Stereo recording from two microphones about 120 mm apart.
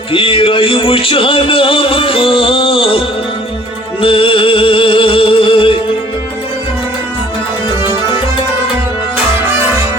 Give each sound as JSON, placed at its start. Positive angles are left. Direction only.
{"t": 0.1, "sound": "music", "side_deg": 50}
{"t": 4.0, "sound": "music", "side_deg": 50}